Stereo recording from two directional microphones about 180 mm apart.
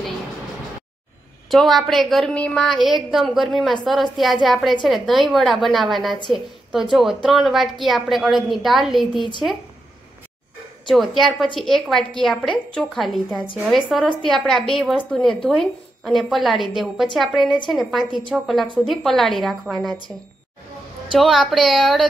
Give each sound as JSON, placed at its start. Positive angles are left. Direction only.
{"t": 1.5, "sound": "a woman's voice", "side_deg": 0}
{"t": 10.9, "sound": "a woman's voice", "side_deg": 0}
{"t": 21.1, "sound": "a woman's voice", "side_deg": 0}